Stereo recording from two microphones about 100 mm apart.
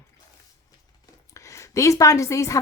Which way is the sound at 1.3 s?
30° left (ahead or behind).